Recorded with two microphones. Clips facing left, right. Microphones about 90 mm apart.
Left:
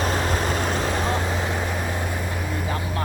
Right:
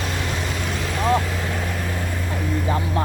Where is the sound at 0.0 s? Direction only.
40° left (ahead or behind).